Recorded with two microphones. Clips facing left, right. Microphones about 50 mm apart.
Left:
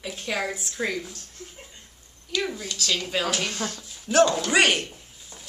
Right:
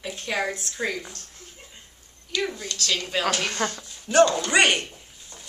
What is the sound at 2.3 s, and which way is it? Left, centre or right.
A man's voice, centre.